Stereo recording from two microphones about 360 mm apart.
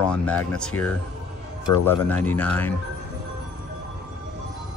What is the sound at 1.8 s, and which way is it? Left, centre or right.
Speech, centre.